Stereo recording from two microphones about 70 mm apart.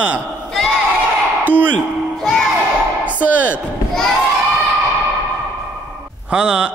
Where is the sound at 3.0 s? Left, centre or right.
Right.